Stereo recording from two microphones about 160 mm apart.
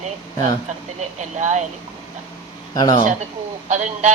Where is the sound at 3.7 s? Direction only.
45° right (ahead or behind).